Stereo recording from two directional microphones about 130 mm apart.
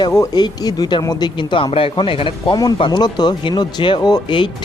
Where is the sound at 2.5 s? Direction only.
35° left (ahead or behind).